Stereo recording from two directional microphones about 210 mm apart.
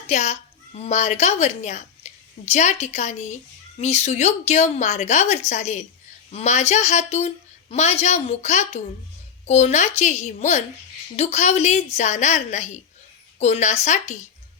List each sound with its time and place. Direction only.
0.1 s speech: 35° left (ahead or behind)